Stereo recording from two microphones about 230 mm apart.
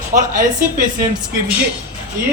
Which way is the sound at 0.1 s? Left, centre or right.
Right.